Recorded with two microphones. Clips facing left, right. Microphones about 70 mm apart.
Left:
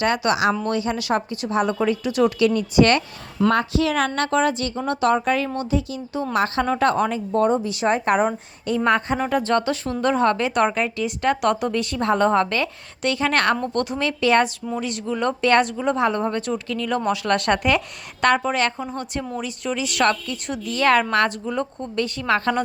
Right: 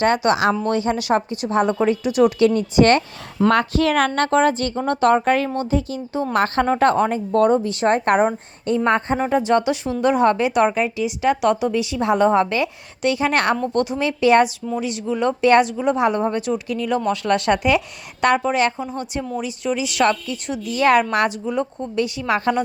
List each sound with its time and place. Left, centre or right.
0.0 s a woman's voice: right
2.5 s a woman's voice: right
3.7 s a woman's voice: right
8.6 s speech: right
9.1 s a woman's voice: centre
17.1 s a woman's voice: centre